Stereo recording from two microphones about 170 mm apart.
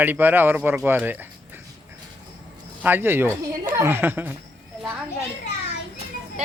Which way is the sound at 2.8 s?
10° right (ahead or behind).